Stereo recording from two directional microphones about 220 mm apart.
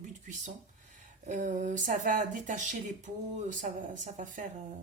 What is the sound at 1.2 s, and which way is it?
A woman's voice, 35° right (ahead or behind).